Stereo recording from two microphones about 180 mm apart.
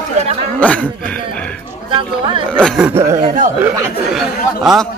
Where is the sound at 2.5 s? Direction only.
5° left (ahead or behind).